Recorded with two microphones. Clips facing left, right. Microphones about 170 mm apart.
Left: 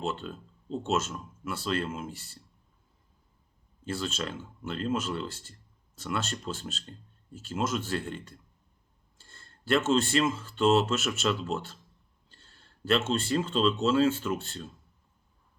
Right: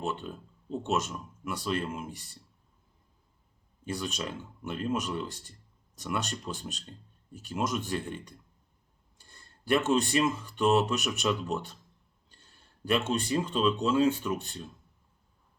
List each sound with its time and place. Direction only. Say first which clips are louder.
0.0 s speech: left 1 dB; 15° right (ahead or behind)
3.8 s speech: left 1 dB; 15° right (ahead or behind)